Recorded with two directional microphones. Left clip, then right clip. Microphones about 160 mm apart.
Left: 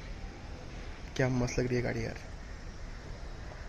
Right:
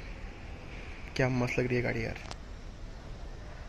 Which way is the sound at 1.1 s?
Centre (ahead or behind).